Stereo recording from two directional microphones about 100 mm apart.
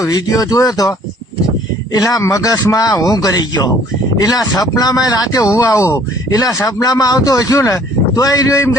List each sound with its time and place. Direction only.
0.0 s speech: 40° left (ahead or behind)